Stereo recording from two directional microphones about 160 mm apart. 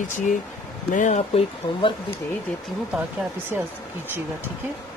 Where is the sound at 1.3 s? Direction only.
35° left (ahead or behind).